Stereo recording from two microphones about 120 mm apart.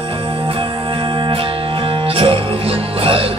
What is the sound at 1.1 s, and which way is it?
Music, 45° right (ahead or behind).